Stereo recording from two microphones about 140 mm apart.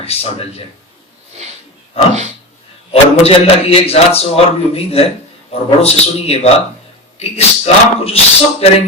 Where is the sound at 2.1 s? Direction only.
55° right (ahead or behind).